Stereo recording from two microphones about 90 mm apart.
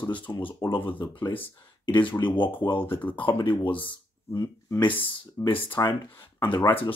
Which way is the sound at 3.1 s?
65° left (ahead or behind).